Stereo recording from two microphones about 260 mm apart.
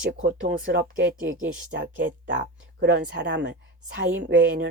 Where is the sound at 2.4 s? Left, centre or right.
Right.